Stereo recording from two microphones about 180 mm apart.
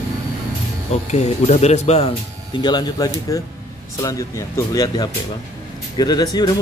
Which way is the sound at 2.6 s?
25° left (ahead or behind).